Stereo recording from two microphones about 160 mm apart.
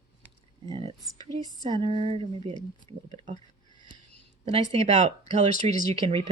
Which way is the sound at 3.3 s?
50° right (ahead or behind).